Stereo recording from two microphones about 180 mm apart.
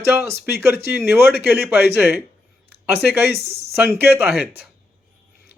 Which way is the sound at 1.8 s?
65° left (ahead or behind).